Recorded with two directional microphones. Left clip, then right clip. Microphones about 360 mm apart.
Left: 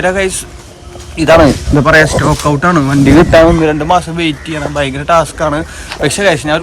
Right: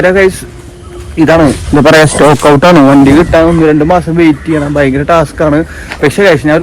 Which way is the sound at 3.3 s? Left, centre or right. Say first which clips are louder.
Even; left.